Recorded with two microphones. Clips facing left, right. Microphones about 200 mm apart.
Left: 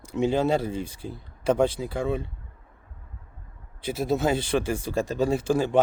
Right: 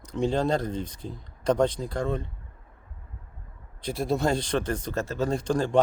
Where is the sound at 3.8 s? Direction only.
5° left (ahead or behind).